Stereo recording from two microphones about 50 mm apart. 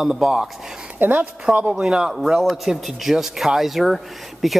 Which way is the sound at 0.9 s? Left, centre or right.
Right.